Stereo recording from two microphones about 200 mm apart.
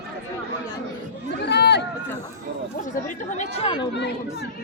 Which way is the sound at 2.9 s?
40° left (ahead or behind).